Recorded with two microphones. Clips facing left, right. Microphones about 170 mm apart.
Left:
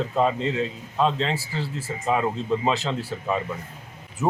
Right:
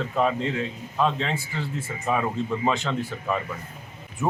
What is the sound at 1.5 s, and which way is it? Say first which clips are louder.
Speech: left 1 dB; 35° left (ahead or behind).